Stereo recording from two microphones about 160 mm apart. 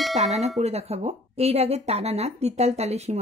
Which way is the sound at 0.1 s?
45° right (ahead or behind).